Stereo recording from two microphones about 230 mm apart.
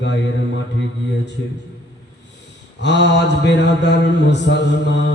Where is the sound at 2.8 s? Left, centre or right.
Left.